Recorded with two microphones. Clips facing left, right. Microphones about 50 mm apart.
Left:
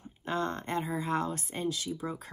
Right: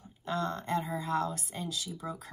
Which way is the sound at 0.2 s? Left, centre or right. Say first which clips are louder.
Left 1 dB; left.